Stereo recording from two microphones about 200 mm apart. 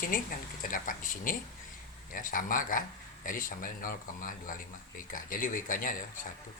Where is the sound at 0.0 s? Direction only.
45° left (ahead or behind).